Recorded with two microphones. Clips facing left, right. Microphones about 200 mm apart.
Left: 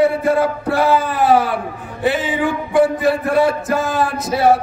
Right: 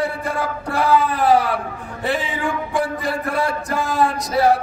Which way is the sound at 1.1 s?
Centre (ahead or behind).